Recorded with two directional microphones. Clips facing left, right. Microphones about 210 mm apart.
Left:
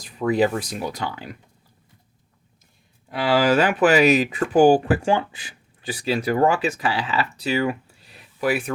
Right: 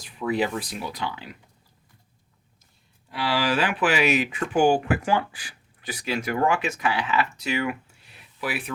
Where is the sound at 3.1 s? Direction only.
45° left (ahead or behind).